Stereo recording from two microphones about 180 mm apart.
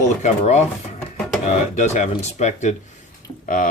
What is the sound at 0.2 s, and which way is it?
Speech, 40° left (ahead or behind).